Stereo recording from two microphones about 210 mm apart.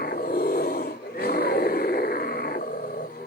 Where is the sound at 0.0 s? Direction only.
45° left (ahead or behind).